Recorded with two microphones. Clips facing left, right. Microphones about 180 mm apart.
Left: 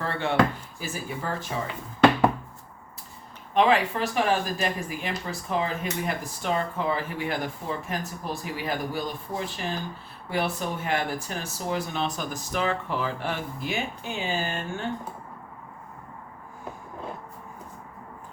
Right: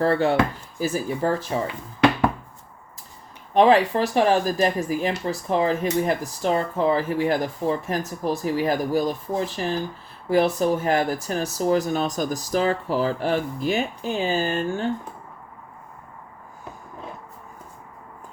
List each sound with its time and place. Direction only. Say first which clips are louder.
0.0 s speech: right 5 dB; 40° right (ahead or behind)
3.5 s speech: right 5 dB; 40° right (ahead or behind)
10.2 s speech: right 9 dB; 40° right (ahead or behind)